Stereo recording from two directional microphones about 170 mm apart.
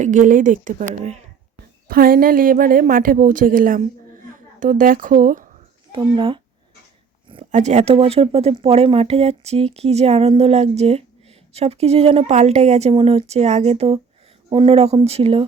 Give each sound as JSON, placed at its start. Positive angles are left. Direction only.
{"t": 0.0, "sound": "speech", "side_deg": -50}
{"t": 1.9, "sound": "a woman's voice", "side_deg": -60}
{"t": 5.9, "sound": "a child's voice", "side_deg": -30}
{"t": 7.5, "sound": "speech", "side_deg": -45}